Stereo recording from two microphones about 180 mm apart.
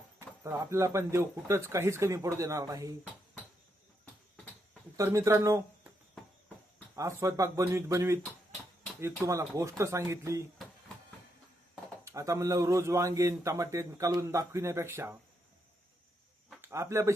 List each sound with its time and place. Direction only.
0.2 s a man's voice: 15° right (ahead or behind)
4.9 s speech: 15° right (ahead or behind)
6.9 s a man's voice: 15° right (ahead or behind)
9.2 s a man's voice: 15° right (ahead or behind)
12.0 s a man's voice: 15° right (ahead or behind)
16.5 s a sound: 15° right (ahead or behind)